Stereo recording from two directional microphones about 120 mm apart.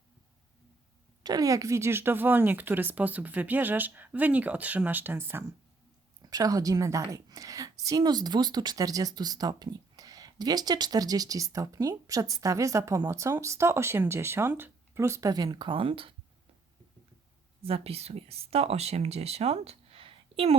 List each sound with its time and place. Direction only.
1.2 s speech: 30° right (ahead or behind)
6.3 s a woman's voice: 30° right (ahead or behind); by 16.1 s 50° right (ahead or behind)
17.7 s speech: 55° right (ahead or behind)